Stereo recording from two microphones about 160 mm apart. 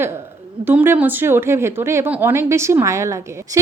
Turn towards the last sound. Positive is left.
turn(degrees=-20)  # may be behind; listen again after turning